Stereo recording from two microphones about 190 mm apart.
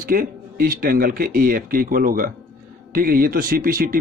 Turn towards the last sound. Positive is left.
turn(degrees=-50)  # may be behind; listen again after turning